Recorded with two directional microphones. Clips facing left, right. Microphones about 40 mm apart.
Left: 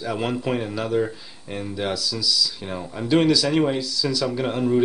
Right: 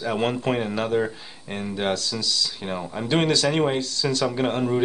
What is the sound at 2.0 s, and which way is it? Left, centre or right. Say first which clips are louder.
Speech: left 2 dB; right.